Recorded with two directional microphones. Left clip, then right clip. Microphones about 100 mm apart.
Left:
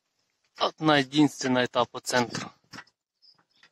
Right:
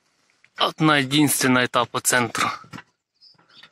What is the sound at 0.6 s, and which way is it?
Speech, 15° left (ahead or behind).